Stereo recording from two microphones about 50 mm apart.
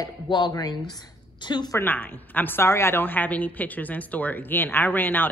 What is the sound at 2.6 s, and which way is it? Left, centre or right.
Speech, left.